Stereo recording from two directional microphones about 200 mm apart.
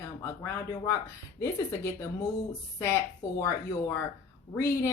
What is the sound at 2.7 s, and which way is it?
Speech, 15° left (ahead or behind).